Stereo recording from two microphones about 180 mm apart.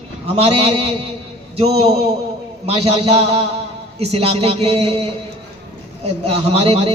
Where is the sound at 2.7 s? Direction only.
35° right (ahead or behind).